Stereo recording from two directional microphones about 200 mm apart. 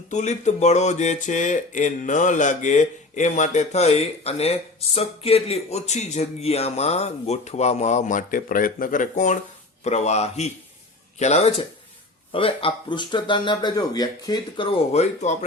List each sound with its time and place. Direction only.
0.1 s speech: 35° left (ahead or behind)